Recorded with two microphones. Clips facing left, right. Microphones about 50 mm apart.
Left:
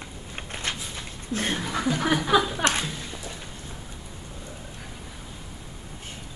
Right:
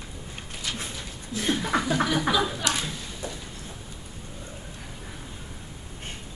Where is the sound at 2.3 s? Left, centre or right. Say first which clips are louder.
Left 7 dB; left.